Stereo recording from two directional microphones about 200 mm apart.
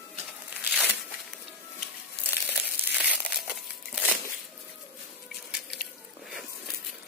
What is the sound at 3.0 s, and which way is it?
Crumpling, 5° right (ahead or behind).